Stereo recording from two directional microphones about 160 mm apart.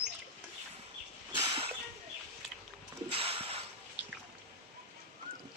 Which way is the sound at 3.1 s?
35° right (ahead or behind).